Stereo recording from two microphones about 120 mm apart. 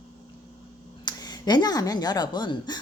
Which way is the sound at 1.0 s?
35° left (ahead or behind).